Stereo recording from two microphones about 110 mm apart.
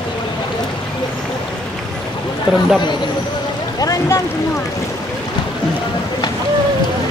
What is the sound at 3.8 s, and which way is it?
Boat, 30° left (ahead or behind).